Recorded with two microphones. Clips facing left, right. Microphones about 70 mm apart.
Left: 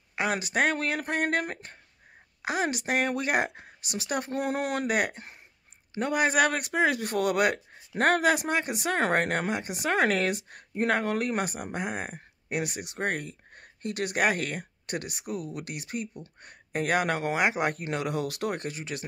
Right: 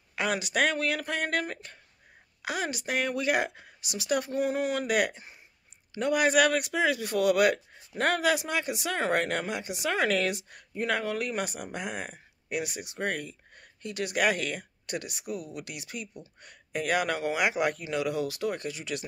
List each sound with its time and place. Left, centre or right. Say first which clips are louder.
0.1 s speech: left 1 dB; left
2.7 s speech: left 2 dB; left
4.4 s speech: right 1 dB; left
4.8 s speech: even; left